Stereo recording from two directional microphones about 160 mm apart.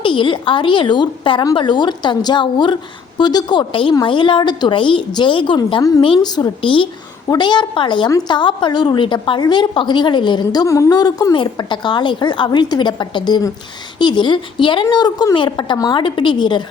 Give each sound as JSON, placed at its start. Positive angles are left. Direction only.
{"t": 0.0, "sound": "a woman's voice", "side_deg": 30}